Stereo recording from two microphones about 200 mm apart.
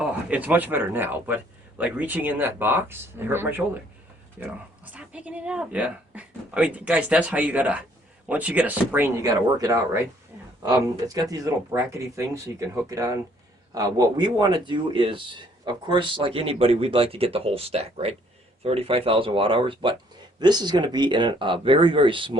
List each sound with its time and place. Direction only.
0.0 s speech: 5° right (ahead or behind)
4.9 s speech: 5° right (ahead or behind); by 22.4 s 25° right (ahead or behind)